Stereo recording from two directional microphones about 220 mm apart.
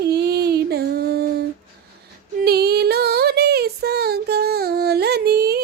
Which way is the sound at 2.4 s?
45° right (ahead or behind).